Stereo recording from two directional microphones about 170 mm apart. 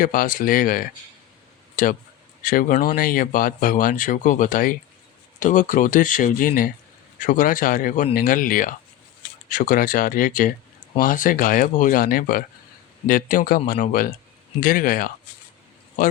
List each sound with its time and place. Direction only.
0.0 s speech: 55° left (ahead or behind)